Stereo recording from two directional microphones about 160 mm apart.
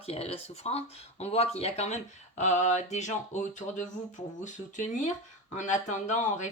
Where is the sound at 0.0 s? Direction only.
40° left (ahead or behind).